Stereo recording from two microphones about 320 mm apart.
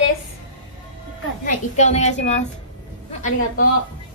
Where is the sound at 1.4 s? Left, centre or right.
Left.